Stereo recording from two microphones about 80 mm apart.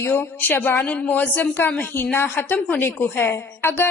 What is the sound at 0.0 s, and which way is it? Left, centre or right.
A woman's voice, left.